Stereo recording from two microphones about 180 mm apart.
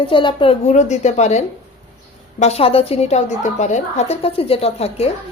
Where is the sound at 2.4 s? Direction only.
35° left (ahead or behind).